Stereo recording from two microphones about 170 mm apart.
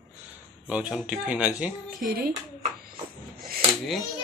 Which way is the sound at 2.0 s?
60° right (ahead or behind).